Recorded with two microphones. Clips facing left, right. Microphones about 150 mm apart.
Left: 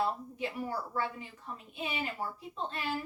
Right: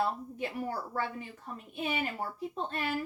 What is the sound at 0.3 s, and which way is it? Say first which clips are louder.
A woman's voice: right 1 dB; 50° right (ahead or behind).